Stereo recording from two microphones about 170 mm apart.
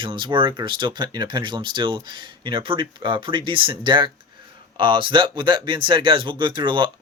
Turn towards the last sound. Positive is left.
turn(degrees=-30)  # may be behind; listen again after turning